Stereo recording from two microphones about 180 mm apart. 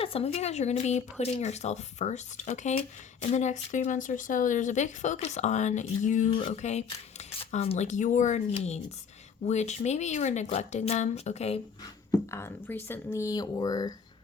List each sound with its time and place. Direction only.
0.0 s speech: 35° left (ahead or behind)
12.3 s speech: 15° left (ahead or behind)